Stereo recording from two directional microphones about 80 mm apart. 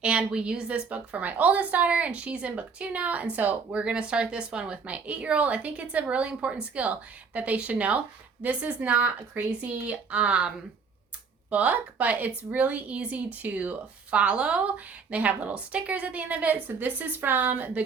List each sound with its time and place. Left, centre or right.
0.0 s a woman's voice: centre
11.5 s speech: centre